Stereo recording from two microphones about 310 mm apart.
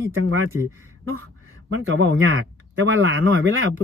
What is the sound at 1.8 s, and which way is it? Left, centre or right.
Speech, right.